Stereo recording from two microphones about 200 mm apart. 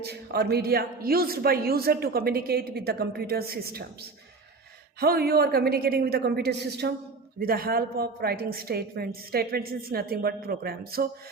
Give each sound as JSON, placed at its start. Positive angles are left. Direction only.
{"t": 0.0, "sound": "a woman's voice", "side_deg": -55}
{"t": 4.9, "sound": "a woman's voice", "side_deg": -50}